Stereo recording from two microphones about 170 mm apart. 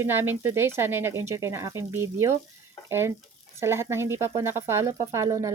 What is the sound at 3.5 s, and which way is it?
Speech, 15° right (ahead or behind).